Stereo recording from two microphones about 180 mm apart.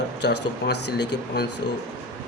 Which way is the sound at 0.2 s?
65° left (ahead or behind).